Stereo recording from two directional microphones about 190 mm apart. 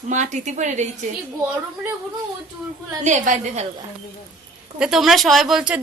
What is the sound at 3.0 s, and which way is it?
Speech, 40° right (ahead or behind).